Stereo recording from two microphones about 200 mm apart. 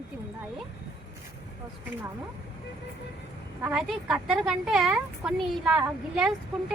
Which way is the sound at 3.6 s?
5° right (ahead or behind).